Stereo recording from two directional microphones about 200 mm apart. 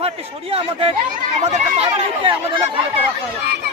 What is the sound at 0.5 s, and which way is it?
Speech, 30° right (ahead or behind).